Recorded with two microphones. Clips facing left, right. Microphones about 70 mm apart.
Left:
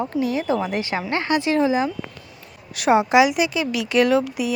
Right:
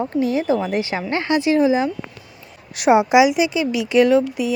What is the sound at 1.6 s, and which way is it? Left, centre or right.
Speech, right.